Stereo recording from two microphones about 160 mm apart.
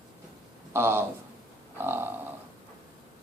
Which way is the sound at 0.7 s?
15° right (ahead or behind).